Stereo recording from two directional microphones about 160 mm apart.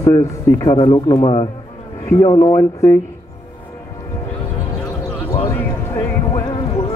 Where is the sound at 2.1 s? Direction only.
20° left (ahead or behind).